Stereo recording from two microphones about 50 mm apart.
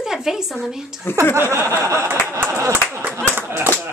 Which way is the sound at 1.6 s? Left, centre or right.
Right.